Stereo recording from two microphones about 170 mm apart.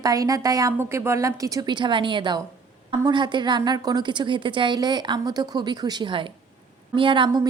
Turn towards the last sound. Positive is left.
turn(degrees=-30)  # may be behind; listen again after turning